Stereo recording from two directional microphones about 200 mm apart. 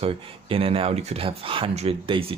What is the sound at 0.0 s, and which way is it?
Speech, 30° right (ahead or behind).